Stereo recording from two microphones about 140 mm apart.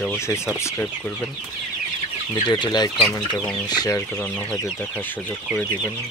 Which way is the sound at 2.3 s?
30° left (ahead or behind).